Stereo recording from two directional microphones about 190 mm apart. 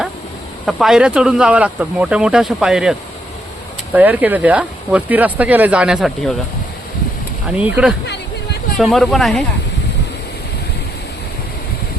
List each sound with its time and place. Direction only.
0.6 s speech: centre (ahead or behind)
3.9 s speech: 10° right (ahead or behind)
7.5 s speech: 5° right (ahead or behind)